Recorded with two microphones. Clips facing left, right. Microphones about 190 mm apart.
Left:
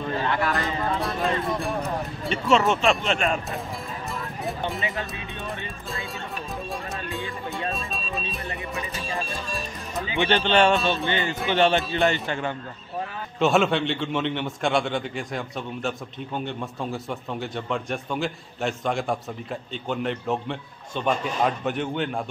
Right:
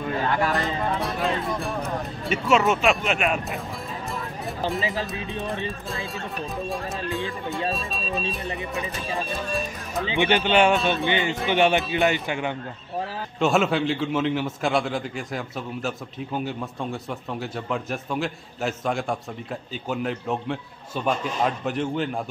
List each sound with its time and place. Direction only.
0.5 s speech: centre (ahead or behind)
4.5 s speech: centre (ahead or behind)
6.7 s speech: centre (ahead or behind)
10.0 s speech: 15° right (ahead or behind)
11.4 s speech: 15° right (ahead or behind)
13.4 s speech: centre (ahead or behind)